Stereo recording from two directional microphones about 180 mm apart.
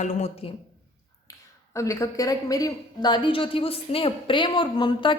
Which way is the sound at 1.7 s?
15° left (ahead or behind).